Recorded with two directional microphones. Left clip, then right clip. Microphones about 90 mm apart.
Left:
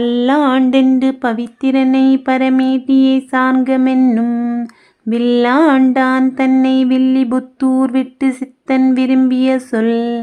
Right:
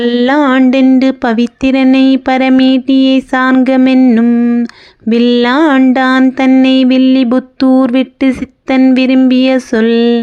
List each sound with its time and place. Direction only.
0.0 s music: 35° right (ahead or behind)
0.9 s speech: 35° right (ahead or behind)
4.3 s a sound: 10° right (ahead or behind)
4.6 s speech: 40° right (ahead or behind)
6.6 s music: 35° right (ahead or behind)